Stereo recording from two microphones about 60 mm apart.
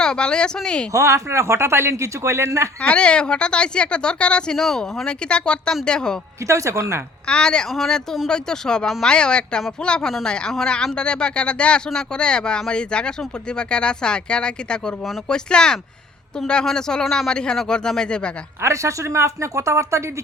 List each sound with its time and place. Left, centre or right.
0.0 s speech: centre
0.9 s speech: right
2.8 s speech: centre
5.0 s speech: centre
6.5 s speech: right
7.3 s speech: centre
18.6 s speech: right